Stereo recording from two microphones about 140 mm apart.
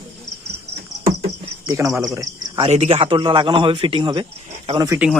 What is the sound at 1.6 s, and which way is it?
Speech, 25° right (ahead or behind).